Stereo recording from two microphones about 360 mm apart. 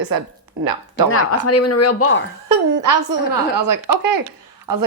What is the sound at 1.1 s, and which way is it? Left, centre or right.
Speech, left.